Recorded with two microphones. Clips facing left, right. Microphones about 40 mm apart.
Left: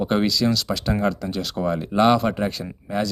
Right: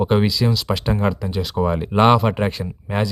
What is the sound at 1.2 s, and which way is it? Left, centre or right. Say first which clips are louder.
Speech: right 3 dB; centre.